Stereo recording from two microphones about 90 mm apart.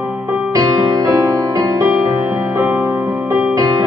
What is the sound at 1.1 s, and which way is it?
Music, 35° right (ahead or behind).